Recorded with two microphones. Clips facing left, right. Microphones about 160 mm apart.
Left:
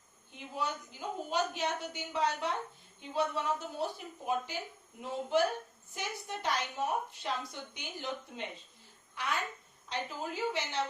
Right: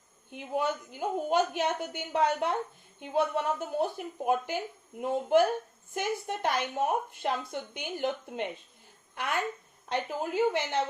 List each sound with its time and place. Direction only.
0.3 s a woman's voice: 55° right (ahead or behind)